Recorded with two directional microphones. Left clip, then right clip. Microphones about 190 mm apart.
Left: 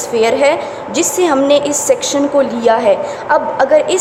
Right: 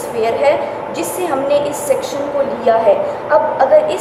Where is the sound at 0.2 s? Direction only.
55° left (ahead or behind).